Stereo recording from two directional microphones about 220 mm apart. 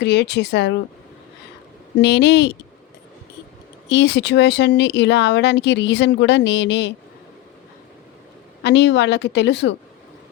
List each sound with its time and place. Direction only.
0.0 s speech: 50° left (ahead or behind)
2.0 s speech: 50° left (ahead or behind)
3.8 s speech: 50° left (ahead or behind)
8.6 s speech: 50° left (ahead or behind)